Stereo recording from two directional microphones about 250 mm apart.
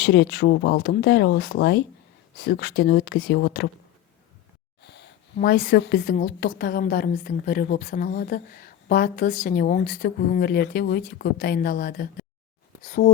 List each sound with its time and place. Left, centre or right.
0.0 s a woman's voice: left
4.8 s a woman's voice: left